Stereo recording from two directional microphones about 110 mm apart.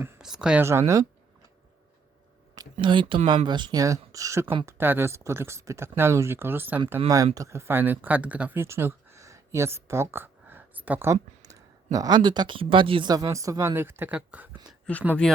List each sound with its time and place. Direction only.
0.2 s speech: 5° right (ahead or behind)
0.6 s speech: 25° right (ahead or behind)
2.8 s speech: 50° right (ahead or behind); by 8.6 s 15° right (ahead or behind)
8.6 s a sound: 25° right (ahead or behind)
11.9 s speech: 35° right (ahead or behind)
13.2 s speech: 30° right (ahead or behind); by 14.5 s 10° right (ahead or behind)
14.9 s speech: 10° left (ahead or behind)